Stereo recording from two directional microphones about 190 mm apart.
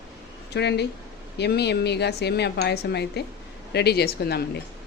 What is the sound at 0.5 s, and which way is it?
A woman's voice, 60° left (ahead or behind).